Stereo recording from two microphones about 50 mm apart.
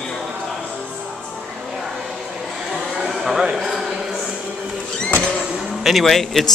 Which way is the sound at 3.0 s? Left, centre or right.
Centre.